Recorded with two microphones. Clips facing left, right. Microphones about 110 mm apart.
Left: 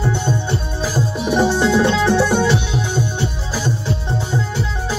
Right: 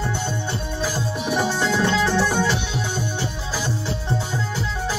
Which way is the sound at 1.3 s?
25° left (ahead or behind).